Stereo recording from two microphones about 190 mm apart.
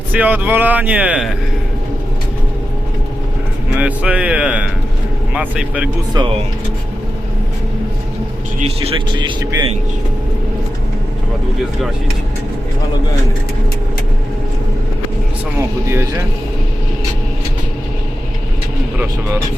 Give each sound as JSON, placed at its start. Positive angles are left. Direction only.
{"t": 0.1, "sound": "speech", "side_deg": -10}
{"t": 3.8, "sound": "speech", "side_deg": -5}
{"t": 6.2, "sound": "speech", "side_deg": -20}
{"t": 8.5, "sound": "speech", "side_deg": -35}
{"t": 15.5, "sound": "speech", "side_deg": -15}